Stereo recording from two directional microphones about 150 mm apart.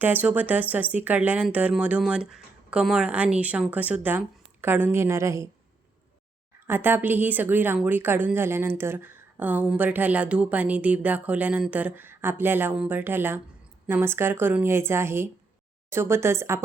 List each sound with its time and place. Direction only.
0.0 s a woman's voice: 10° right (ahead or behind)
6.7 s a woman's voice: 15° right (ahead or behind)